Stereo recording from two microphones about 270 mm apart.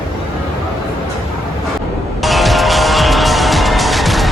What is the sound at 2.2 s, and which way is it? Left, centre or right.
Music, centre.